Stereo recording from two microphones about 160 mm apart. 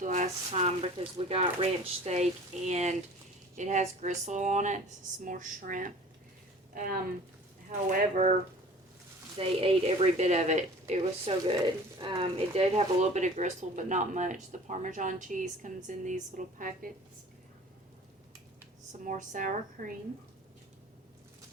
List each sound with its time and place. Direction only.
0.0 s speech: 50° right (ahead or behind)
6.7 s speech: 65° right (ahead or behind)
7.9 s speech: 50° right (ahead or behind)
9.4 s speech: 35° right (ahead or behind); by 16.9 s 60° right (ahead or behind)
19.0 s speech: 50° right (ahead or behind)